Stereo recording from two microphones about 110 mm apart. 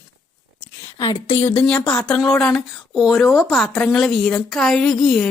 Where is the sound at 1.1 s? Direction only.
55° left (ahead or behind).